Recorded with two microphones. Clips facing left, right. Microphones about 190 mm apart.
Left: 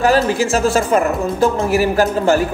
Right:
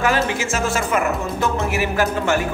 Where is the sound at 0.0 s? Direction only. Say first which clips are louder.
Left 6 dB; 35° left (ahead or behind).